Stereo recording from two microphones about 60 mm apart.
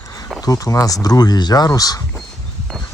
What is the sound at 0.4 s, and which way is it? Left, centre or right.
Speech, left.